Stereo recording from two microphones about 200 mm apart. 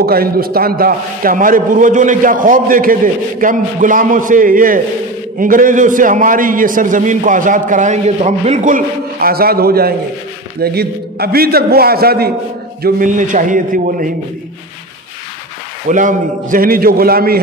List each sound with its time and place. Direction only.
0.0 s a man's voice: 50° right (ahead or behind)
15.9 s a man's voice: 40° right (ahead or behind)